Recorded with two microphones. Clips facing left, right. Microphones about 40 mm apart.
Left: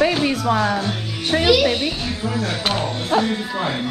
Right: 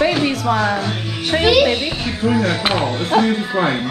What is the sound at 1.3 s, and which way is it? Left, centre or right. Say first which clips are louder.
Speech: right 2 dB; right.